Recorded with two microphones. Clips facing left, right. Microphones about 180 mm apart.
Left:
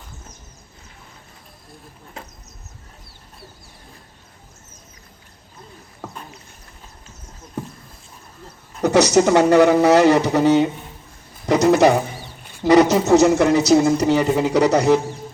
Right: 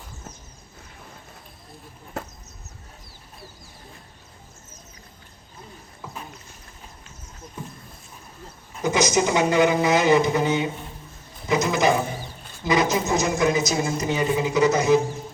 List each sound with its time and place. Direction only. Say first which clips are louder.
8.8 s speech: left 7 dB; 70° left (ahead or behind)